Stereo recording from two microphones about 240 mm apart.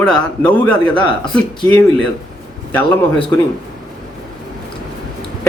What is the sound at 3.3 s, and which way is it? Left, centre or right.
Speech, centre.